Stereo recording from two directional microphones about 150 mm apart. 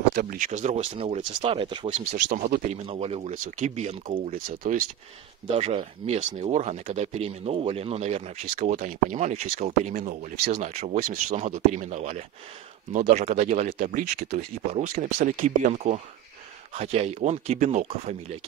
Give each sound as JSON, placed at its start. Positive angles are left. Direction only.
{"t": 0.1, "sound": "speech", "side_deg": -75}
{"t": 1.9, "sound": "speech", "side_deg": -55}
{"t": 4.5, "sound": "speech", "side_deg": -70}
{"t": 5.5, "sound": "speech", "side_deg": -40}
{"t": 10.6, "sound": "speech", "side_deg": -50}